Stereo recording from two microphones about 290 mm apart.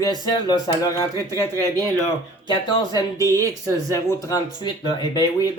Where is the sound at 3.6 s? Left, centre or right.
Centre.